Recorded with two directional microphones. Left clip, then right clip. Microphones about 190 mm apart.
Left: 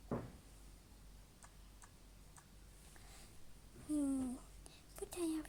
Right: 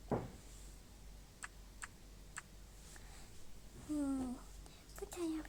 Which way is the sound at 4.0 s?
20° left (ahead or behind).